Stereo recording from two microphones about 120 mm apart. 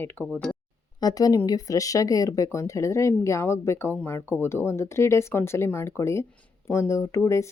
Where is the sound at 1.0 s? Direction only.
30° left (ahead or behind).